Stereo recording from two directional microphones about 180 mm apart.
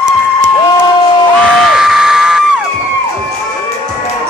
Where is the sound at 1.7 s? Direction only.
Centre (ahead or behind).